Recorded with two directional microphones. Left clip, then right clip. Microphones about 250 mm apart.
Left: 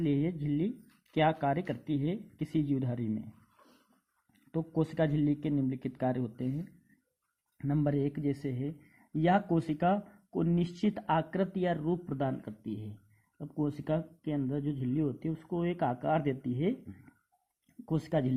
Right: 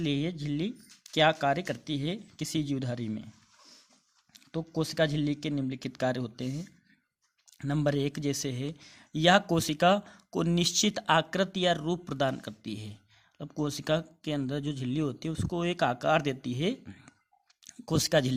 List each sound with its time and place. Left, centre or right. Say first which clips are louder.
0.0 s speech: even; centre
4.8 s speech: right 2 dB; centre
7.6 s speech: right 2 dB; right
17.8 s speech: right 6 dB; right